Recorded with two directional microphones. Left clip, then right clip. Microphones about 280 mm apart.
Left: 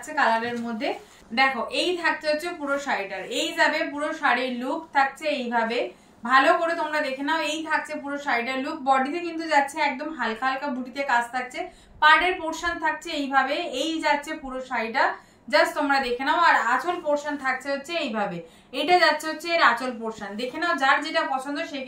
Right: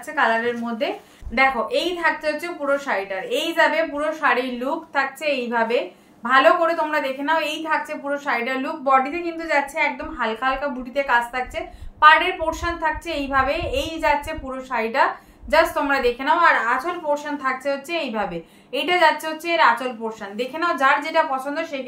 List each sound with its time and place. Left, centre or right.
1.3 s a woman's voice: centre